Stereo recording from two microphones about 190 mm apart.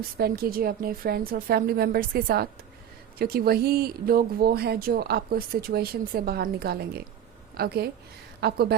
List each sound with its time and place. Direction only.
0.2 s a woman's voice: 55° right (ahead or behind)